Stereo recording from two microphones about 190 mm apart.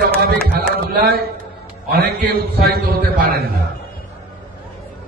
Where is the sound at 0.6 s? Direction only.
55° right (ahead or behind).